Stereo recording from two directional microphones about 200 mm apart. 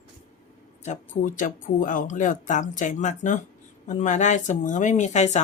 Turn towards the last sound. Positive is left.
turn(degrees=35)  # may be behind; listen again after turning